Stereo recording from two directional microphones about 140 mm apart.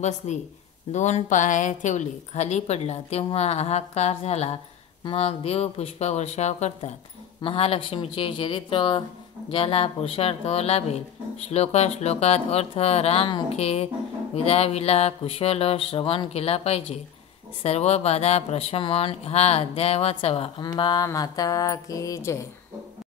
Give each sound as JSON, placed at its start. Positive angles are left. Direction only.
{"t": 0.2, "sound": "a woman's voice", "side_deg": 50}
{"t": 20.6, "sound": "mantra", "side_deg": 30}